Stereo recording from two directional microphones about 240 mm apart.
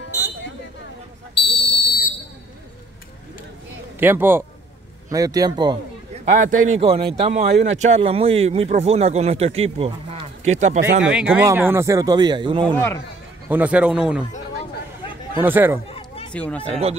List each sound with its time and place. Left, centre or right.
1.3 s a sound: left
4.0 s speech: centre
6.2 s a man's voice: right
11.1 s speech: centre
13.5 s a man's voice: centre
15.4 s speech: centre
15.9 s a sound: left
16.3 s a man's voice: centre
16.6 s speech: right